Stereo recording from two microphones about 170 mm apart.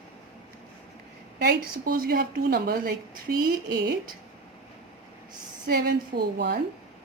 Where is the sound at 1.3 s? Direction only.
60° right (ahead or behind).